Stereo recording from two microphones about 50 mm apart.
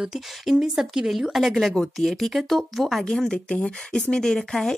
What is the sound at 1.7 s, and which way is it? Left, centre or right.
Speech, centre.